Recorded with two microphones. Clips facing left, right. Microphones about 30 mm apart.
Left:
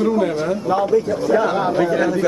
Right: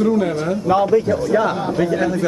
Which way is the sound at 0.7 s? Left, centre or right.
Centre.